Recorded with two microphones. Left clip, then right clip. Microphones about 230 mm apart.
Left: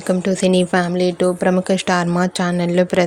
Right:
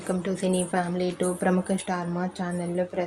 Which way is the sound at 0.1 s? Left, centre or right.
Left.